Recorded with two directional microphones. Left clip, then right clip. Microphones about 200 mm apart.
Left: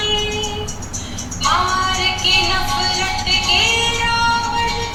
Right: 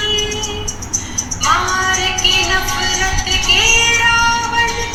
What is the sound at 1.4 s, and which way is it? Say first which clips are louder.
Music: right 2 dB; 25° right (ahead or behind).